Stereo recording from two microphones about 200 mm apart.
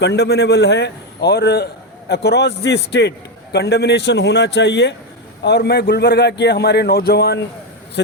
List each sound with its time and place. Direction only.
0.0 s a man's voice: 60° left (ahead or behind)